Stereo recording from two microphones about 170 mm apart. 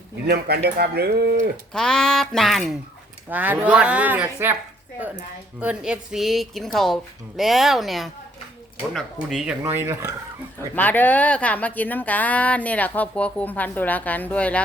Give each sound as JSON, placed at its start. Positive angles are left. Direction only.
{"t": 0.3, "sound": "speech", "side_deg": -70}
{"t": 1.7, "sound": "speech", "side_deg": 5}
{"t": 5.5, "sound": "speech", "side_deg": -5}
{"t": 10.8, "sound": "speech", "side_deg": 10}